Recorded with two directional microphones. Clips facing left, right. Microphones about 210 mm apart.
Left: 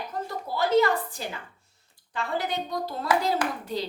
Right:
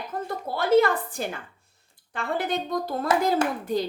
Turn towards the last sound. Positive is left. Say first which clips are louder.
# right 5 dB
turn(degrees=-50)  # may be behind; listen again after turning